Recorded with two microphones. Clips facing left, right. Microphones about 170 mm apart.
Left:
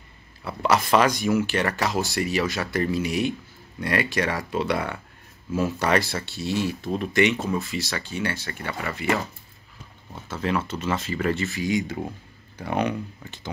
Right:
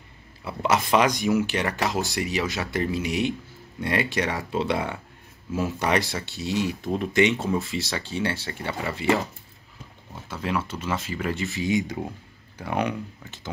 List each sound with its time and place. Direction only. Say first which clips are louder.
0.4 s speech: left 1 dB; 20° right (ahead or behind)
10.3 s speech: left 2 dB; 10° right (ahead or behind)
12.5 s speech: left 1 dB; 10° right (ahead or behind)